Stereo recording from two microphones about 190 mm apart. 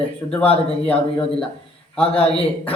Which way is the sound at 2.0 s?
5° left (ahead or behind).